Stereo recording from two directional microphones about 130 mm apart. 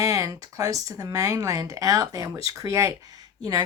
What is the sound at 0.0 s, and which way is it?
A woman's voice, 25° right (ahead or behind).